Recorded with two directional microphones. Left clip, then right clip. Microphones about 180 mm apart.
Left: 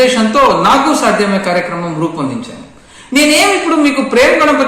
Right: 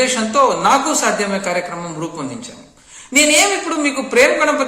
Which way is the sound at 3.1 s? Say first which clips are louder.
Left 4 dB; 5° right (ahead or behind).